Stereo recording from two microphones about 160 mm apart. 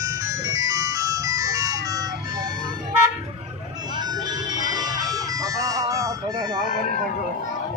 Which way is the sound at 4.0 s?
25° right (ahead or behind).